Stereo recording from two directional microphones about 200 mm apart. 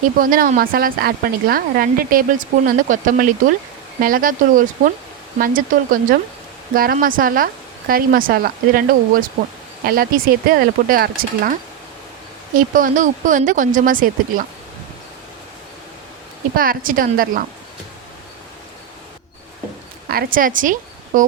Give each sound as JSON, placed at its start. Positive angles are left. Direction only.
{"t": 0.2, "sound": "a woman's voice", "side_deg": -45}
{"t": 12.5, "sound": "speech", "side_deg": -45}
{"t": 16.6, "sound": "a woman's voice", "side_deg": -45}
{"t": 20.1, "sound": "a woman's voice", "side_deg": -45}